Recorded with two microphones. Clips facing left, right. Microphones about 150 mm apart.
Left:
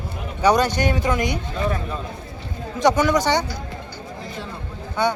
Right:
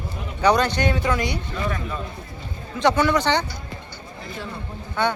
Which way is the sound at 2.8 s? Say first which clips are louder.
Left 1 dB; 15° left (ahead or behind).